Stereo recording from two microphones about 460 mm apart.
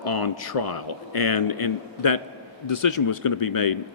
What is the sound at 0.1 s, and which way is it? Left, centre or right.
Speech, left.